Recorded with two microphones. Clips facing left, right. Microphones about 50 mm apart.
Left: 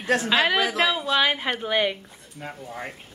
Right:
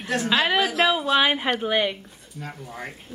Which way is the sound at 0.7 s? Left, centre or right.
Centre.